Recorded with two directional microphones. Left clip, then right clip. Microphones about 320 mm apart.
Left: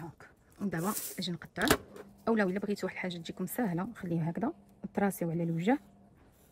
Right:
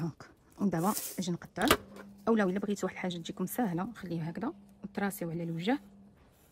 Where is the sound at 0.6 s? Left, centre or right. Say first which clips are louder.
Right 4 dB; centre.